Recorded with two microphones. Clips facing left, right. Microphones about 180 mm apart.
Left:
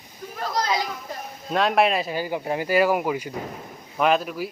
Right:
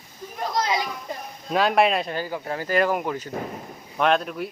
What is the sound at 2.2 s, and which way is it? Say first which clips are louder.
Speech: left 3 dB; 15° left (ahead or behind).